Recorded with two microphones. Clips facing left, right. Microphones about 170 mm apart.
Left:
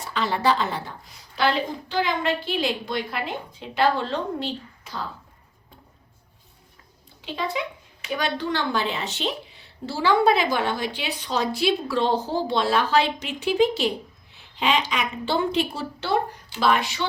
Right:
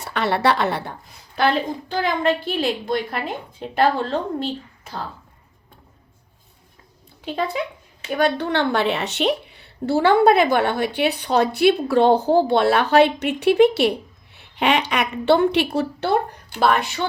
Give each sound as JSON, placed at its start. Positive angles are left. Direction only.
{"t": 0.0, "sound": "a woman's voice", "side_deg": -65}
{"t": 1.4, "sound": "a woman's voice", "side_deg": -50}
{"t": 7.3, "sound": "a woman's voice", "side_deg": -50}